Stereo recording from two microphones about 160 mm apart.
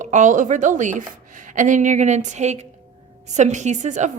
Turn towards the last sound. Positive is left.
turn(degrees=-50)  # may be behind; listen again after turning